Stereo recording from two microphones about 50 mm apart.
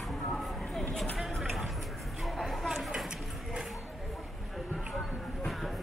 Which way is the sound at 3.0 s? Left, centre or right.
Centre.